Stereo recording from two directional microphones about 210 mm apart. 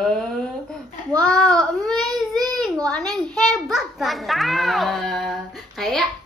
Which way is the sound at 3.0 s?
20° right (ahead or behind).